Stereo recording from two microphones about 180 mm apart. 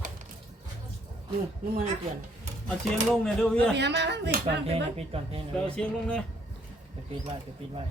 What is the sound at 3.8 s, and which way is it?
Speech, 70° right (ahead or behind).